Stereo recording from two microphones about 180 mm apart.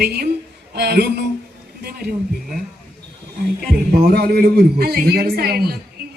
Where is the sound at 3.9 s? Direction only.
60° right (ahead or behind).